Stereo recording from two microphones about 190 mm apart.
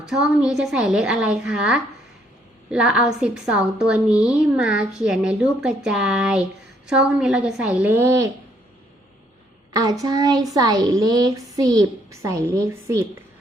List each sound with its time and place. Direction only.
0.0 s a woman's voice: 5° right (ahead or behind)
9.7 s a woman's voice: 20° right (ahead or behind)